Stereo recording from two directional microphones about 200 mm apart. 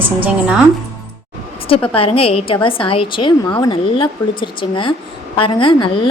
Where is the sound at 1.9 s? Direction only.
30° left (ahead or behind).